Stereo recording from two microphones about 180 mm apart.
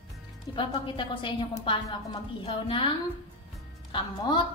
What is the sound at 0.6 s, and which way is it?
Speech, 25° left (ahead or behind).